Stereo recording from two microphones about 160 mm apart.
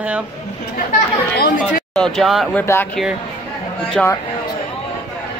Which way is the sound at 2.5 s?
15° left (ahead or behind).